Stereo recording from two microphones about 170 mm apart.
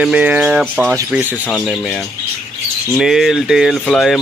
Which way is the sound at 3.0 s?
Centre (ahead or behind).